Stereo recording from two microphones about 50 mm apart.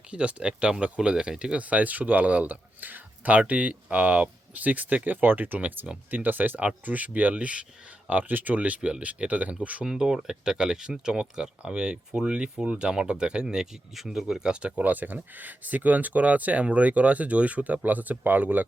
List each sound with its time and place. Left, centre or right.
0.1 s speech: right
1.6 s speech: right
5.5 s speech: right
7.3 s speech: right
8.0 s speech: right
9.8 s speech: centre
14.8 s speech: right